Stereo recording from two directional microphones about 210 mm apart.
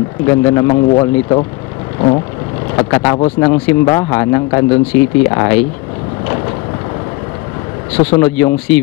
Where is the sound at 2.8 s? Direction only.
20° left (ahead or behind).